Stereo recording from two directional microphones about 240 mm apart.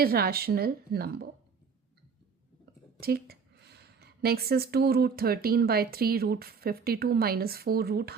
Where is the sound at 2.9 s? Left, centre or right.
Right.